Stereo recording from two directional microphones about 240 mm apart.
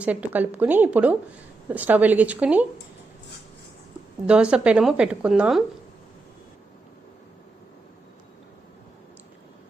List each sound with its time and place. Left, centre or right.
0.0 s speech: centre
4.3 s speech: centre